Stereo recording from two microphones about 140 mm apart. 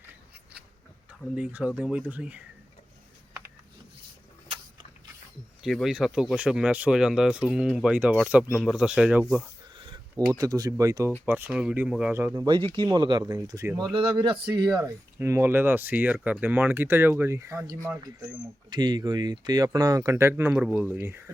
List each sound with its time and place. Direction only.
1.4 s speech: 10° right (ahead or behind)
5.6 s speech: centre (ahead or behind)
9.7 s a sound: 35° right (ahead or behind)
10.3 s speech: 25° right (ahead or behind)
11.3 s speech: 10° right (ahead or behind)
12.1 s speech: 20° right (ahead or behind)
12.7 s speech: 30° right (ahead or behind)
13.9 s speech: 35° right (ahead or behind)
14.8 s speech: 20° right (ahead or behind)
18.7 s speech: 30° right (ahead or behind)